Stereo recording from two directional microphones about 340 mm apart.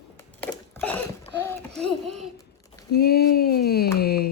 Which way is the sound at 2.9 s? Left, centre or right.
Left.